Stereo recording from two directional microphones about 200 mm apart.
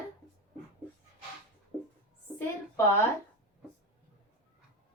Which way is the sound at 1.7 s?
Centre (ahead or behind).